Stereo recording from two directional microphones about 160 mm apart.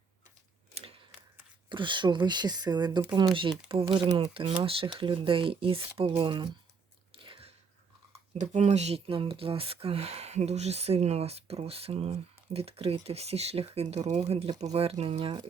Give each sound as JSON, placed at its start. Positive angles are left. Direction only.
{"t": 0.7, "sound": "a sound", "side_deg": -40}
{"t": 1.7, "sound": "speech", "side_deg": -30}
{"t": 4.1, "sound": "speech", "side_deg": -35}
{"t": 7.2, "sound": "biting", "side_deg": -35}
{"t": 8.3, "sound": "speech", "side_deg": -45}